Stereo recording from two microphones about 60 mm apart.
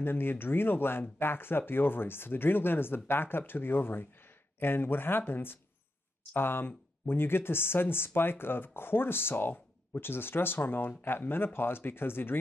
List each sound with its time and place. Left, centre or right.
0.0 s speech: left